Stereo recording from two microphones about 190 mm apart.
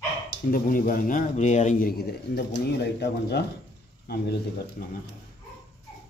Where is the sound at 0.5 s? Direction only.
45° left (ahead or behind).